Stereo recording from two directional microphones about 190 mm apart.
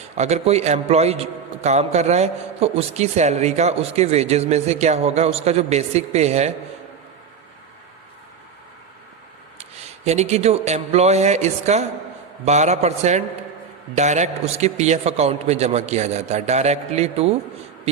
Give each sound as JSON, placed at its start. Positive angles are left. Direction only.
{"t": 0.2, "sound": "a man's voice", "side_deg": -35}
{"t": 9.6, "sound": "a man's voice", "side_deg": -35}